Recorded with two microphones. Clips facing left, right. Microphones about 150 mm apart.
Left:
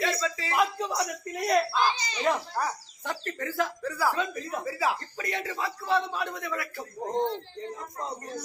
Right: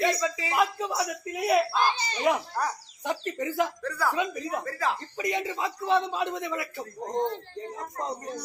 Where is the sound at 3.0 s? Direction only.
15° right (ahead or behind).